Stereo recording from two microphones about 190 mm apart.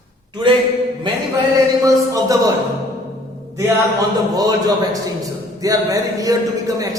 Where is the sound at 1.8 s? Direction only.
15° right (ahead or behind).